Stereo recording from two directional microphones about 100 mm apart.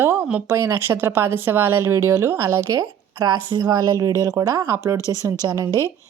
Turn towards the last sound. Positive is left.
turn(degrees=-40)  # may be behind; listen again after turning